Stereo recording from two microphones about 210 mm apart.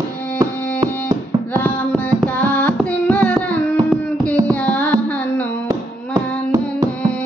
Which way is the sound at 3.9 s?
5° left (ahead or behind).